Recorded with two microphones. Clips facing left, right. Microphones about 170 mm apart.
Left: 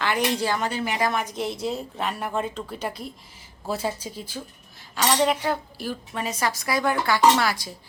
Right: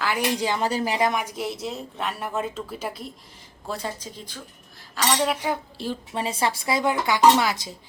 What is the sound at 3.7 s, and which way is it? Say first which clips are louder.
A woman's voice: left 4 dB; 10° left (ahead or behind).